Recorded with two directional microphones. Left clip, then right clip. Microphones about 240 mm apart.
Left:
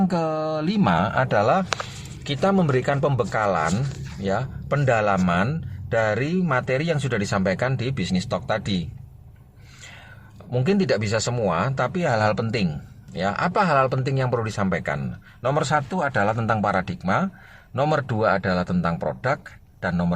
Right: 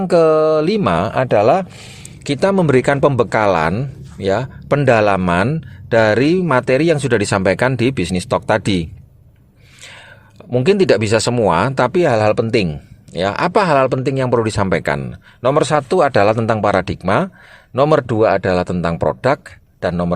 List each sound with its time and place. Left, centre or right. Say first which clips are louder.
0.1 s speech: right 13 dB; right
10.5 s speech: right 9 dB; right